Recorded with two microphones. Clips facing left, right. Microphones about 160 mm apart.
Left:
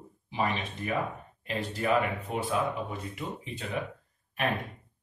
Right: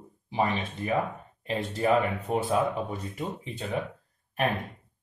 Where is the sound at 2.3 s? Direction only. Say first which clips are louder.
Right 5 dB; 45° right (ahead or behind).